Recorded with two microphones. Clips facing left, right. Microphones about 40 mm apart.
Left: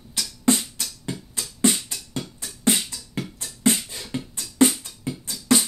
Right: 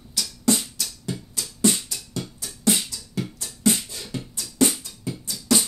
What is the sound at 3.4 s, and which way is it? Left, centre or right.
Beatboxing, left.